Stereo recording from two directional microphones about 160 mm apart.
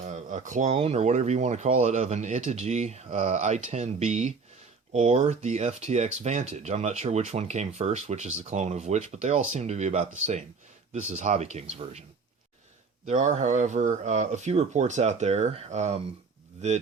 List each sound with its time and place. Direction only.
0.0 s speech: 50° right (ahead or behind)
13.1 s speech: 50° right (ahead or behind)